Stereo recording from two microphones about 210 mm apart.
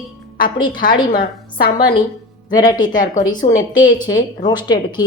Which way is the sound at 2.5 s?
20° left (ahead or behind).